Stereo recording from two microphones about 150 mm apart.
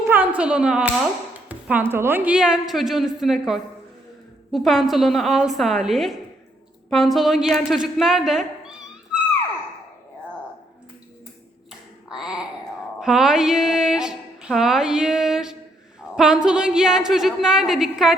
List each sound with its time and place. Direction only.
0.1 s a woman's voice: 10° right (ahead or behind)
12.0 s a sound: 5° right (ahead or behind)
13.0 s a woman's voice: 5° right (ahead or behind)